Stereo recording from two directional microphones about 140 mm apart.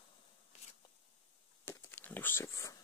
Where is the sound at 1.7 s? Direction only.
15° left (ahead or behind).